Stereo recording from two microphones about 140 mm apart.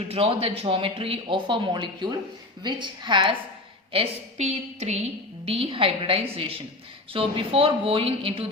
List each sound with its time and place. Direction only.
0.1 s speech: 45° right (ahead or behind)
3.9 s a woman's voice: 45° right (ahead or behind)